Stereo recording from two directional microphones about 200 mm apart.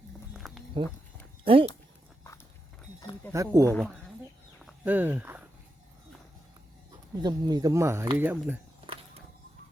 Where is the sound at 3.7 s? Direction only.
5° left (ahead or behind).